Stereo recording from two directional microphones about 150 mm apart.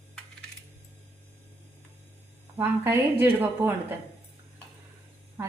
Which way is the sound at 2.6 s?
15° right (ahead or behind).